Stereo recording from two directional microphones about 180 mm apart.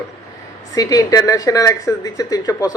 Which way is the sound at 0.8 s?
20° left (ahead or behind).